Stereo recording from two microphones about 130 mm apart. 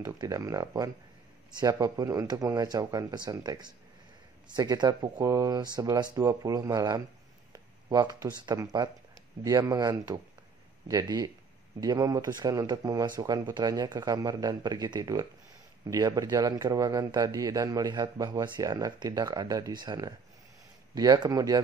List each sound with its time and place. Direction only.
0.2 s speech: 25° right (ahead or behind)
7.5 s a sound: 30° right (ahead or behind)
8.5 s speech: 35° right (ahead or behind)